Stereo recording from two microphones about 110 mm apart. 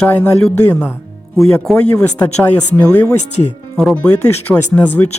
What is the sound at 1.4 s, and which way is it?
Speech, 5° left (ahead or behind).